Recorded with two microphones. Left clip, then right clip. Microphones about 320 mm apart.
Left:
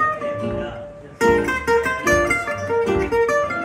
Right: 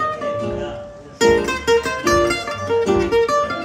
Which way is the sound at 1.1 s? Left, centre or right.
Centre.